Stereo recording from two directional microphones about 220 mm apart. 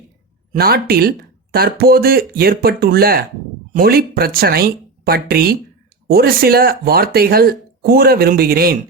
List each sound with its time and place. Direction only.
0.5 s speech: 45° right (ahead or behind)